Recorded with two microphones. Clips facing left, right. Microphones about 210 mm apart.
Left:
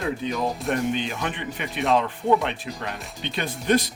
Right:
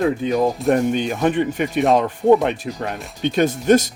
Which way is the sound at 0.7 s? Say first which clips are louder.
Right 6 dB; 45° right (ahead or behind).